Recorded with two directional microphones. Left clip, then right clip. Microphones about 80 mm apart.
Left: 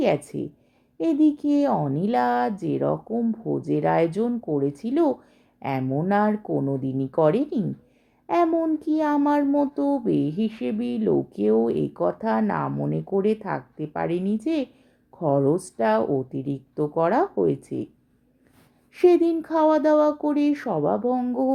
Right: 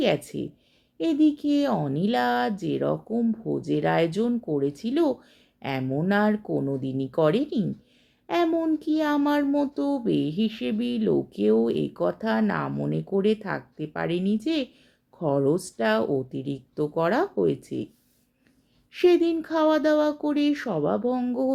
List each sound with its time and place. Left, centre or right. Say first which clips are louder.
0.0 s speech: left 2 dB; left
8.4 s speech: left 2 dB; left
18.9 s speech: left 2 dB; left